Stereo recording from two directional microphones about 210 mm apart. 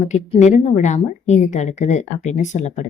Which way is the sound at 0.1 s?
35° left (ahead or behind).